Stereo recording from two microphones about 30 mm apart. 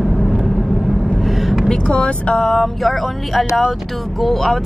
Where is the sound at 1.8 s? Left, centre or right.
Left.